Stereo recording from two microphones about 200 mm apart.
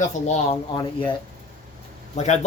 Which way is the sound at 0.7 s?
25° left (ahead or behind).